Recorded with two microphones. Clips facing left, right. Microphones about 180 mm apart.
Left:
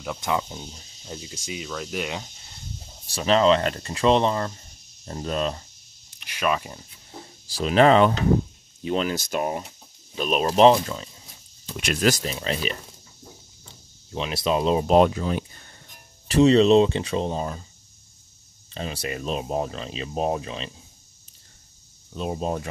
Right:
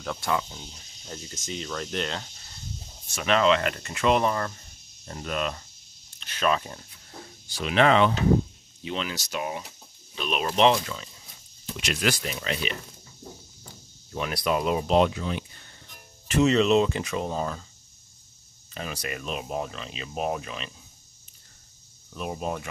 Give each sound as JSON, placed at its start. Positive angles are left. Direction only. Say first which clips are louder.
{"t": 0.0, "sound": "speech", "louder": "left 2 dB", "side_deg": 15}
{"t": 1.0, "sound": "cricket", "louder": "left 2 dB", "side_deg": 10}
{"t": 3.1, "sound": "speech", "louder": "left 3 dB", "side_deg": 30}
{"t": 6.1, "sound": "speech", "louder": "even", "side_deg": 10}
{"t": 7.4, "sound": "speech", "louder": "left 4 dB", "side_deg": 35}
{"t": 11.7, "sound": "speech", "louder": "left 5 dB", "side_deg": 50}
{"t": 14.1, "sound": "speech", "louder": "left 2 dB", "side_deg": 25}
{"t": 14.9, "sound": "speech", "louder": "left 4 dB", "side_deg": 45}
{"t": 18.7, "sound": "speech", "louder": "left 3 dB", "side_deg": 30}
{"t": 22.1, "sound": "speech", "louder": "left 4 dB", "side_deg": 25}